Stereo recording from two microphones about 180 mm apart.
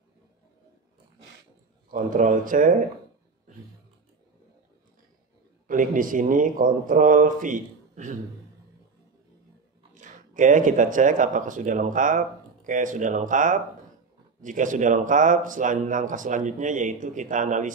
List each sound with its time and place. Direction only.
1.9 s speech: 50° right (ahead or behind)
5.7 s speech: 50° right (ahead or behind)
9.9 s speech: 45° right (ahead or behind)